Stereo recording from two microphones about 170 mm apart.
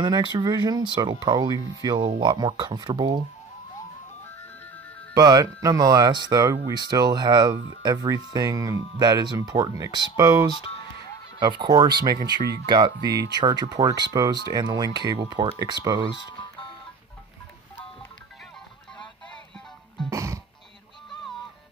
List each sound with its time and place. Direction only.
0.0 s speech: 25° right (ahead or behind)
5.1 s speech: 20° right (ahead or behind)
10.7 s music: 30° left (ahead or behind)
11.3 s speech: 30° right (ahead or behind)
20.1 s music: 20° right (ahead or behind)